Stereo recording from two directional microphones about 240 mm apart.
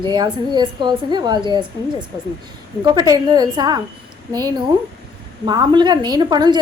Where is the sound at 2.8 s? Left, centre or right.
Centre.